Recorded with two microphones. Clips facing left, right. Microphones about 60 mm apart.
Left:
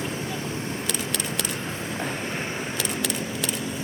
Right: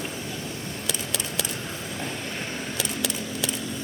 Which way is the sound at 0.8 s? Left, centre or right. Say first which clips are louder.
Left 2 dB; centre.